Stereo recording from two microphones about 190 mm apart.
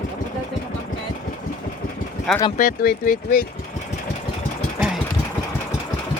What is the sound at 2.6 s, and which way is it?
Speech, 45° left (ahead or behind).